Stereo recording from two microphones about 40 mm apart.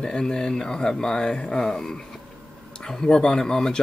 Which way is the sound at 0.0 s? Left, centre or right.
Centre.